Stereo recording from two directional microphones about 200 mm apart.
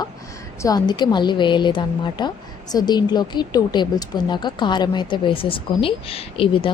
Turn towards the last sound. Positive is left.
turn(degrees=25)  # may be behind; listen again after turning